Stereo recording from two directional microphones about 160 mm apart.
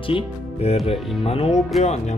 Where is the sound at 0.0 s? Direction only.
35° left (ahead or behind).